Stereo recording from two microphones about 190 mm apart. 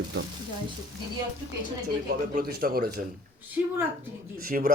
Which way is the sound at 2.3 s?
55° right (ahead or behind).